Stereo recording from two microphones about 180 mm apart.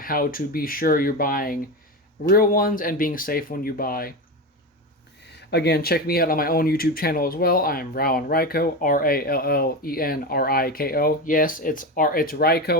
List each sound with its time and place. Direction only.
0.0 s speech: 55° left (ahead or behind)
5.5 s speech: 65° left (ahead or behind)